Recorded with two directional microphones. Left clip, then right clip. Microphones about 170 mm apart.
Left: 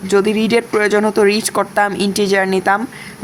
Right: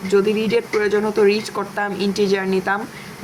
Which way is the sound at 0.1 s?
40° left (ahead or behind).